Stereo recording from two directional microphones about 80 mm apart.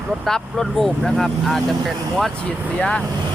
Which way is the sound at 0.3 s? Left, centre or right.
Centre.